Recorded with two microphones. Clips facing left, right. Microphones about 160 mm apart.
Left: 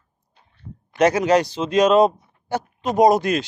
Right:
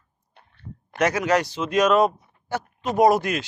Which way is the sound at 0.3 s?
65° right (ahead or behind).